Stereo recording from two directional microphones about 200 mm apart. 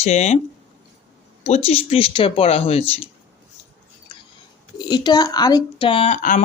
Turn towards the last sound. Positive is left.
turn(degrees=40)  # may be behind; listen again after turning